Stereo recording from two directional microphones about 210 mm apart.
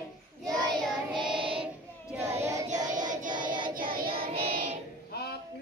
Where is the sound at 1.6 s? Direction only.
5° right (ahead or behind).